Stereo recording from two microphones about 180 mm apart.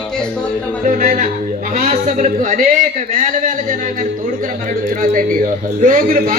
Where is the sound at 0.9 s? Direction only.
45° right (ahead or behind).